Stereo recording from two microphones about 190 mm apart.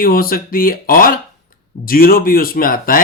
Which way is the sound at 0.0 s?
50° left (ahead or behind).